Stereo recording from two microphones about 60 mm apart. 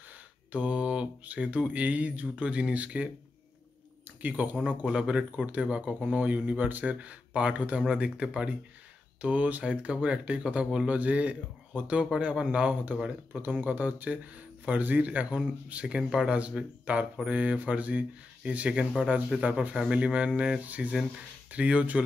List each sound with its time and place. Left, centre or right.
0.5 s speech: right
4.2 s speech: right
4.8 s speech: centre
16.3 s speech: centre
20.6 s speech: right